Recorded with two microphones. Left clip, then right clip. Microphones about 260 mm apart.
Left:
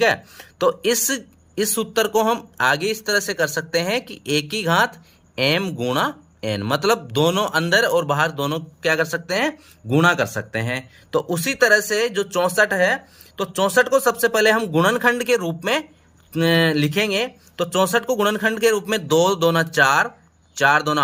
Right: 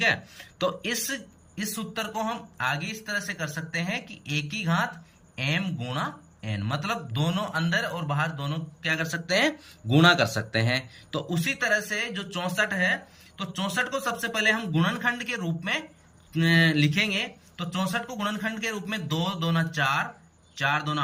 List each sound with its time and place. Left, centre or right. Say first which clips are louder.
0.0 s speech: left 6 dB; centre